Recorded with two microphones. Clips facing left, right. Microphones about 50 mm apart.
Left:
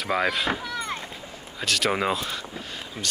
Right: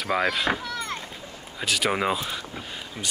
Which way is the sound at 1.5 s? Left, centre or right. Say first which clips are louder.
Even; centre.